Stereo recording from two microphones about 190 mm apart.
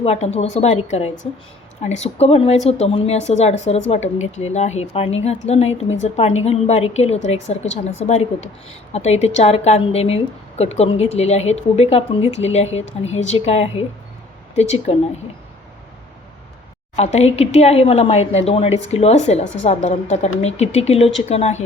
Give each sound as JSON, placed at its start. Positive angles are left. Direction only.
{"t": 0.0, "sound": "a woman's voice", "side_deg": 35}
{"t": 16.9, "sound": "a woman's voice", "side_deg": 35}